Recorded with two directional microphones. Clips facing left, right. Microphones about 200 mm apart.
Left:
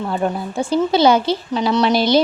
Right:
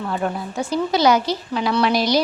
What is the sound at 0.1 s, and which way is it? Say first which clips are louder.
A woman's voice: left 3 dB; 25° left (ahead or behind).